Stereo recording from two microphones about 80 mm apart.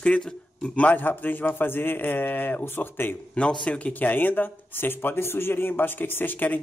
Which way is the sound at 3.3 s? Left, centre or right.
Centre.